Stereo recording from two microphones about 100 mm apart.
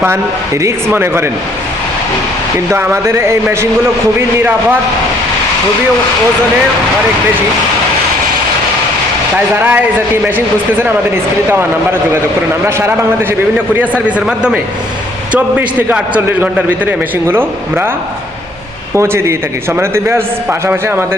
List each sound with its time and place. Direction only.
0.9 s a man's voice: 25° right (ahead or behind)
2.7 s a man's voice: 25° right (ahead or behind)
9.6 s a man's voice: 20° right (ahead or behind)
14.3 s a man's voice: 10° right (ahead or behind)
18.9 s a man's voice: 25° right (ahead or behind)